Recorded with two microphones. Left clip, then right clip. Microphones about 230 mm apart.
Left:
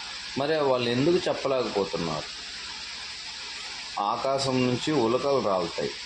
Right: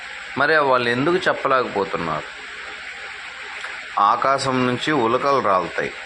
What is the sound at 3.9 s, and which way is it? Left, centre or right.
Speech, centre.